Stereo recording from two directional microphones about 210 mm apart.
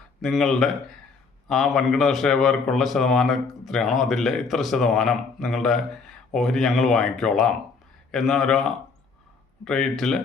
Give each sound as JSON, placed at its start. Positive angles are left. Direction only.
{"t": 0.2, "sound": "a man's voice", "side_deg": 0}